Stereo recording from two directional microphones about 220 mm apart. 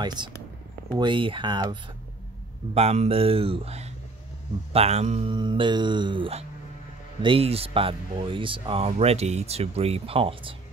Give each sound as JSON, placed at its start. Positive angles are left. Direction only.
{"t": 0.0, "sound": "speech", "side_deg": -20}